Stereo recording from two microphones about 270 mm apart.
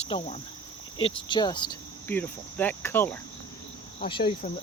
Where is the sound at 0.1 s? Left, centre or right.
Centre.